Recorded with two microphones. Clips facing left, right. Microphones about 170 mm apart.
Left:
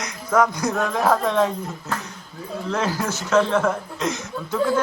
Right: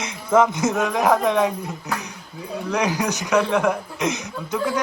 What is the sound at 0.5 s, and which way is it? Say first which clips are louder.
Speech: right 2 dB; 20° right (ahead or behind).